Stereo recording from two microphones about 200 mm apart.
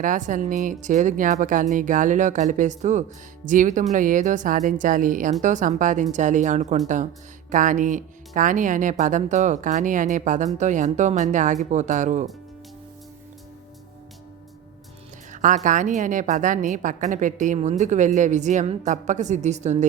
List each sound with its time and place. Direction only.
0.0 s speech: 40° right (ahead or behind)
15.3 s speech: 40° right (ahead or behind)